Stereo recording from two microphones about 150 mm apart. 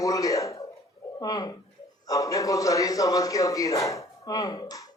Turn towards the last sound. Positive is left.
turn(degrees=25)  # may be behind; listen again after turning